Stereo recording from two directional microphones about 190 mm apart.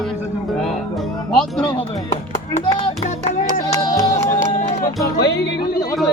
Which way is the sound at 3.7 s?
15° left (ahead or behind).